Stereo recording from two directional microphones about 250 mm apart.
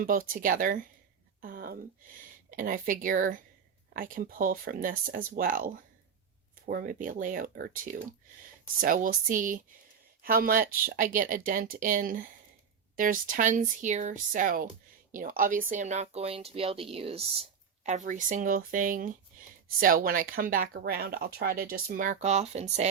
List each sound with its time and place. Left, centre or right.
0.0 s speech: right
1.4 s a sound: right
2.5 s speech: right